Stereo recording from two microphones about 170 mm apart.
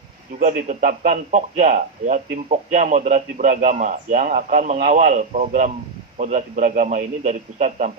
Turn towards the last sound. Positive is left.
turn(degrees=-45)  # may be behind; listen again after turning